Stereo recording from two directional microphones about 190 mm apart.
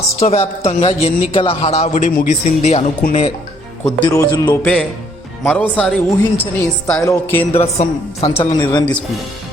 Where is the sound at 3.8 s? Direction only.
20° left (ahead or behind).